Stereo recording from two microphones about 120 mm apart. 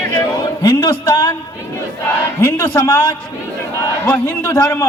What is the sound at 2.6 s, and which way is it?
Speech, 30° left (ahead or behind).